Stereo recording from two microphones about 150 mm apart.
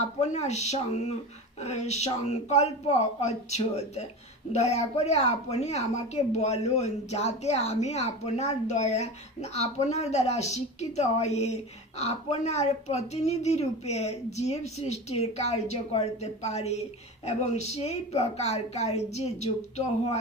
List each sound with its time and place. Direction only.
0.2 s a woman's voice: 45° left (ahead or behind)